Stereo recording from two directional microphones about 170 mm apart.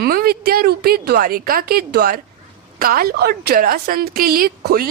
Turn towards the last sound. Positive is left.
turn(degrees=-60)  # may be behind; listen again after turning